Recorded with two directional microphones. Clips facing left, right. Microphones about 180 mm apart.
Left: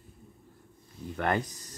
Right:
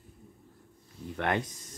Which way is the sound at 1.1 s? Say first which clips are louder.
Left 1 dB; centre (ahead or behind).